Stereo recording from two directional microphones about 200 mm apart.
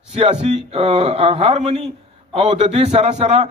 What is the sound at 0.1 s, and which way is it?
A man's voice, 25° right (ahead or behind).